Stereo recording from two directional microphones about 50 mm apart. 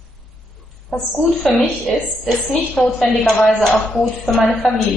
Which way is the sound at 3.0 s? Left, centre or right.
Centre.